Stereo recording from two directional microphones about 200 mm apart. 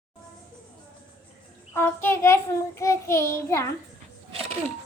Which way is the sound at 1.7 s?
10° left (ahead or behind).